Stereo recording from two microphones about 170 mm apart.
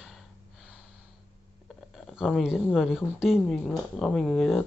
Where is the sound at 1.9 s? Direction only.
5° right (ahead or behind).